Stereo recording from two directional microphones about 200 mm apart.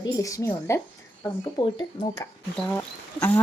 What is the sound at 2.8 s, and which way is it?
Speech, 10° left (ahead or behind).